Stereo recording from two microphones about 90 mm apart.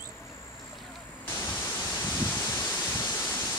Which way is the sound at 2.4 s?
25° left (ahead or behind).